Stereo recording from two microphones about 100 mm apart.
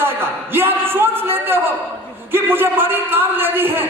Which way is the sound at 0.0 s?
20° right (ahead or behind).